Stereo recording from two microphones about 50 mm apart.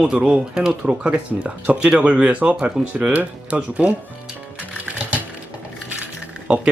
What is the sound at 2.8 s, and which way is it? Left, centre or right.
Speech, centre.